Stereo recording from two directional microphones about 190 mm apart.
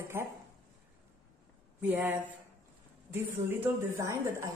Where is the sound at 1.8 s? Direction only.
10° right (ahead or behind).